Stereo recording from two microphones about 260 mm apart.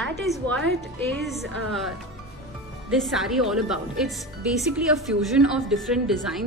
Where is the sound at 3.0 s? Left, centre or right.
Centre.